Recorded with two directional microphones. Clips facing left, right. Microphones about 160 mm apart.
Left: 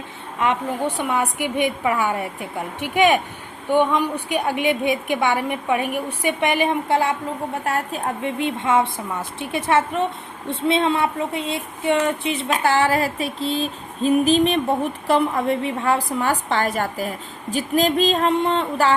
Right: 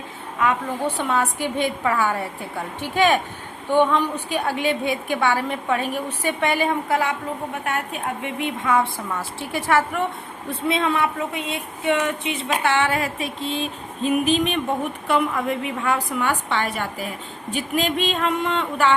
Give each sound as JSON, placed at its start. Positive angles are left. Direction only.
{"t": 0.9, "sound": "a woman's voice", "side_deg": 15}